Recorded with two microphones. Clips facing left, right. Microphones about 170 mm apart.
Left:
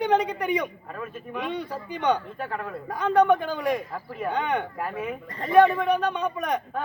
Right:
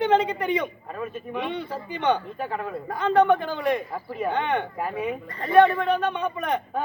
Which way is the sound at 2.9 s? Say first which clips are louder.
Even; 10° left (ahead or behind).